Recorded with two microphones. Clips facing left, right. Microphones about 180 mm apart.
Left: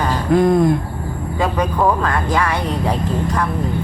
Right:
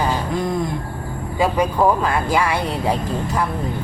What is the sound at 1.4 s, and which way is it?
Speech, 10° right (ahead or behind).